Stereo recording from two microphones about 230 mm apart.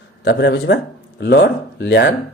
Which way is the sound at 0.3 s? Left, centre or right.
Left.